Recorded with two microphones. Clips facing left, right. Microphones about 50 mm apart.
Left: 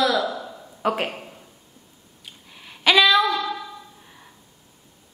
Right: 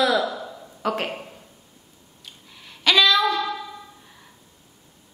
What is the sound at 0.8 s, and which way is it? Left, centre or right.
Speech, centre.